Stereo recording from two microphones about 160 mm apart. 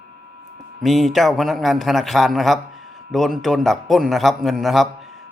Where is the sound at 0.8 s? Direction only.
Centre (ahead or behind).